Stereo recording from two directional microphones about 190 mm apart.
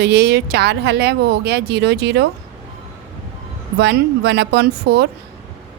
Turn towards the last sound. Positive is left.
turn(degrees=-60)  # may be behind; listen again after turning